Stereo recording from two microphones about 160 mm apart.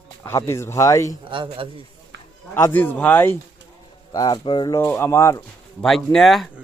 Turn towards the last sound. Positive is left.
turn(degrees=0)  # may be behind; listen again after turning